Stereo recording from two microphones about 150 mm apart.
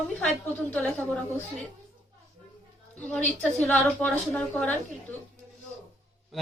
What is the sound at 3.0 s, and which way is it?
A woman's voice, 5° left (ahead or behind).